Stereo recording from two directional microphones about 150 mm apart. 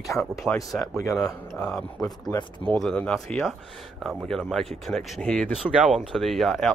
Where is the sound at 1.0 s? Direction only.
20° left (ahead or behind).